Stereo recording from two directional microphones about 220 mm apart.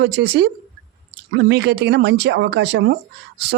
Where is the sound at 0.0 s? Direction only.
50° right (ahead or behind).